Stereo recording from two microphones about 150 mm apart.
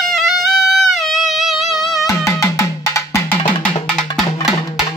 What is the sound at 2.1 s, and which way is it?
Music, 20° left (ahead or behind).